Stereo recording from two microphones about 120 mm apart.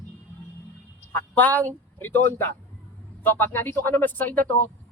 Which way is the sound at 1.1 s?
15° left (ahead or behind).